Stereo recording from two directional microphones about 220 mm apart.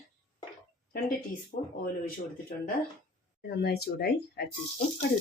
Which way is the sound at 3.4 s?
45° left (ahead or behind).